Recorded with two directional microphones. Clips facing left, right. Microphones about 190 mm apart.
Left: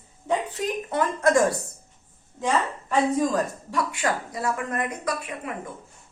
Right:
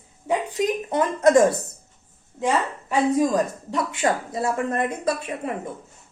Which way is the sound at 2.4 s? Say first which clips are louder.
Right 2 dB; 15° right (ahead or behind).